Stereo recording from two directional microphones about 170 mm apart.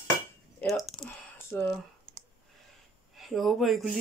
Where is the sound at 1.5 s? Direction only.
10° left (ahead or behind).